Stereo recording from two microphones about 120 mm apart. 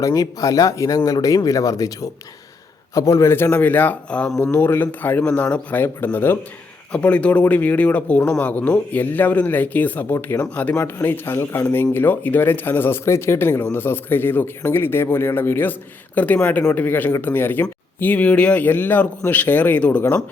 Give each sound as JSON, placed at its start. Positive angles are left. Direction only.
{"t": 0.0, "sound": "speech", "side_deg": 30}
{"t": 4.5, "sound": "speech", "side_deg": 20}